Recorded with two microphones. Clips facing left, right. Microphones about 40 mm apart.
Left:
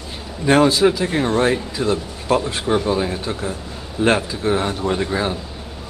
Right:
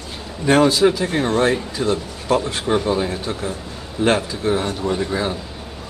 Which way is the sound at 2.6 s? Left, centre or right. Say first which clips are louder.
Even; centre.